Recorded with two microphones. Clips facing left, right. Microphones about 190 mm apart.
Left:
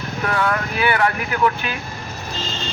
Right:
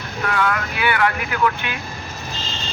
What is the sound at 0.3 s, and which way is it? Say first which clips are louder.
Speech: even; 35° left (ahead or behind).